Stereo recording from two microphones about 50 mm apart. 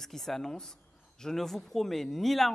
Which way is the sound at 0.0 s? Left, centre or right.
Centre.